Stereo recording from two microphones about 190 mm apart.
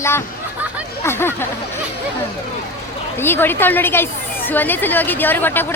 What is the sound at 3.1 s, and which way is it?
Speech, 10° left (ahead or behind).